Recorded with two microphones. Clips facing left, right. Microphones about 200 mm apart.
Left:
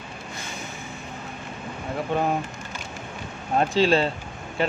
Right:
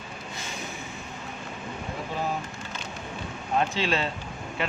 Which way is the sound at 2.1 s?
60° left (ahead or behind).